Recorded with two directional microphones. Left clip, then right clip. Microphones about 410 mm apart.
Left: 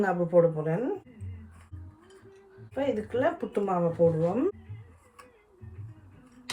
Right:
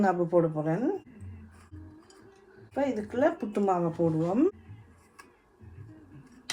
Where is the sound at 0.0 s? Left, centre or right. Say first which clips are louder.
Left 2 dB; centre.